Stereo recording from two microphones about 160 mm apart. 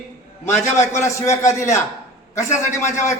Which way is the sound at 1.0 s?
20° left (ahead or behind).